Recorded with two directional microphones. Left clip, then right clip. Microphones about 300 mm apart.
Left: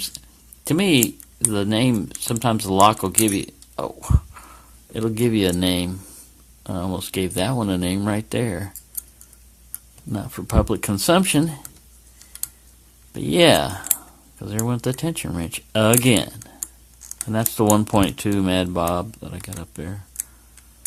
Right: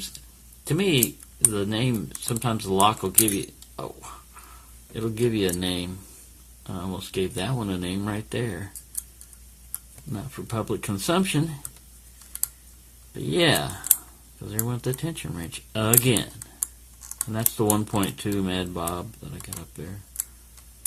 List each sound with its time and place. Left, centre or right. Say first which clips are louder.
0.6 s speech: left 5 dB; left
10.1 s speech: left 8 dB; left
13.1 s speech: left 7 dB; left
17.6 s speech: left 7 dB; left